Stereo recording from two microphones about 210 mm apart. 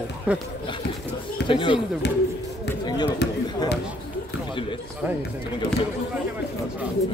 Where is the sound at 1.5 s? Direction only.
25° left (ahead or behind).